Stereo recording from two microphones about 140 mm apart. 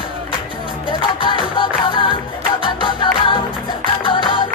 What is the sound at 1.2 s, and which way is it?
Music, 35° left (ahead or behind).